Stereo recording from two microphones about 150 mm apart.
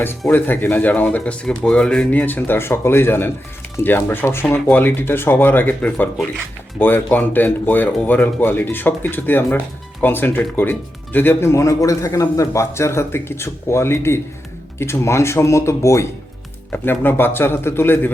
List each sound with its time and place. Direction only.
0.3 s speech: 15° left (ahead or behind)